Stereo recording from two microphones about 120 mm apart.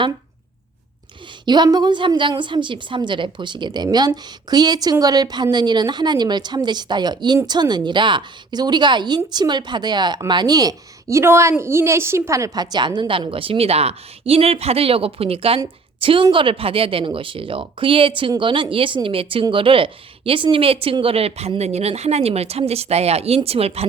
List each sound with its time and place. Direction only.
1.5 s a woman's voice: 35° right (ahead or behind); by 23.8 s 55° right (ahead or behind)